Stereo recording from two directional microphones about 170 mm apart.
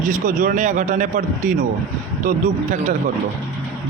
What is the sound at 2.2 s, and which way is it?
Speech, 45° right (ahead or behind).